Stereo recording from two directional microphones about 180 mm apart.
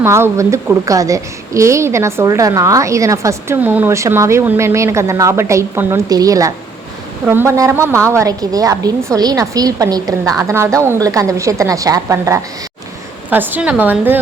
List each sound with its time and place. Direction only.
0.0 s a woman's voice: 15° right (ahead or behind)